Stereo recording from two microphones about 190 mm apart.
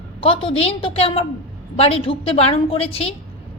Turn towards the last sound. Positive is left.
turn(degrees=30)  # may be behind; listen again after turning